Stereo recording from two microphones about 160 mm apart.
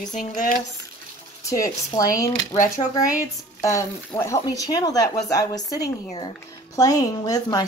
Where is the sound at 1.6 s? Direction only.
20° left (ahead or behind).